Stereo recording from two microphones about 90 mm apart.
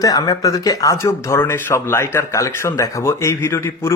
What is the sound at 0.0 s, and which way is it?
Speech, 45° left (ahead or behind).